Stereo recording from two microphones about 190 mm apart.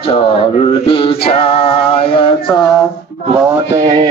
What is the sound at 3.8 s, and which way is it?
Speech, 30° right (ahead or behind).